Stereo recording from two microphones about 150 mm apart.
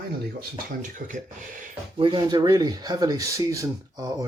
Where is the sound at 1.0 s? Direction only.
65° right (ahead or behind).